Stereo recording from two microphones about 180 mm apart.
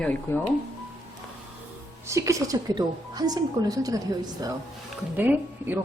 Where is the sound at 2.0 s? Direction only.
15° right (ahead or behind).